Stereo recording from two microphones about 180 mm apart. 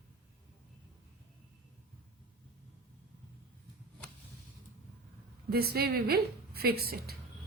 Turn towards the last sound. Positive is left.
turn(degrees=-60)  # may be behind; listen again after turning